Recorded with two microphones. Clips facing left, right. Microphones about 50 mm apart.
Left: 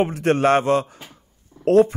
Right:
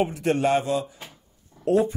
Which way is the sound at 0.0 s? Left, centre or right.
Left.